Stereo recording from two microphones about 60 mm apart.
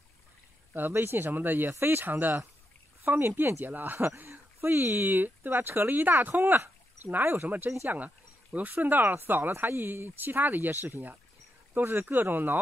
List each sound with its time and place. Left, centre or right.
0.7 s speech: right
3.6 s speech: right